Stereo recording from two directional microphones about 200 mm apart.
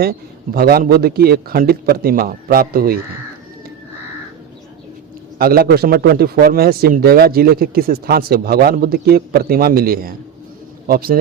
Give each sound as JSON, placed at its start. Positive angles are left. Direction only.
{"t": 0.0, "sound": "a man's voice", "side_deg": -50}
{"t": 5.4, "sound": "a man's voice", "side_deg": -50}